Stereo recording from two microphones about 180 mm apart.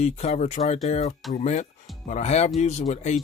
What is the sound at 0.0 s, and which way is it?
Speech, 35° left (ahead or behind).